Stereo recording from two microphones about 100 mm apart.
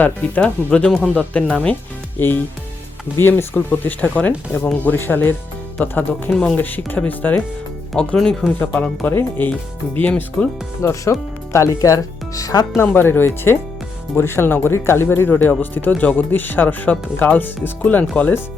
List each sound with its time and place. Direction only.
0.0 s speech: 15° left (ahead or behind)
6.3 s speech: 5° left (ahead or behind)
6.6 s speech: 20° left (ahead or behind)
10.8 s speech: 30° left (ahead or behind)
12.7 s speech: 20° left (ahead or behind)